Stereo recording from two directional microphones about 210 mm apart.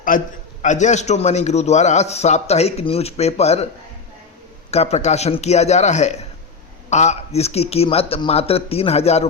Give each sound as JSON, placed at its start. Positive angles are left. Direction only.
{"t": 0.1, "sound": "a man's voice", "side_deg": 40}
{"t": 4.7, "sound": "a man's voice", "side_deg": 30}